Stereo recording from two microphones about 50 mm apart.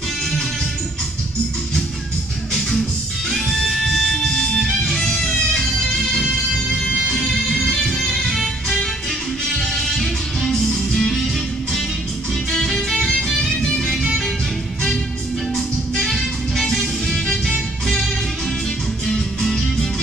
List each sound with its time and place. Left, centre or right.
3.3 s music: centre
6.9 s music: left
7.2 s music: centre
12.4 s music: centre
15.5 s music: centre
19.0 s music: centre